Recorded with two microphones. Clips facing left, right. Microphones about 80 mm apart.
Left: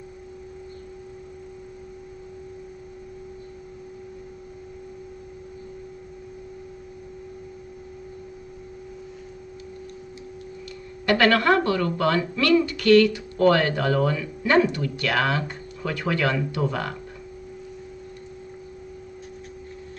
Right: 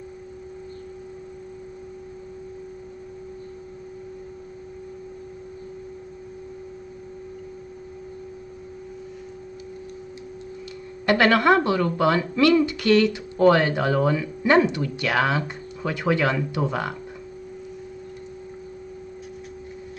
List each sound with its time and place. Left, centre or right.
11.1 s speech: centre